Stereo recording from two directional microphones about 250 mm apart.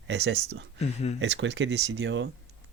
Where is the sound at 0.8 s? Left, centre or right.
Left.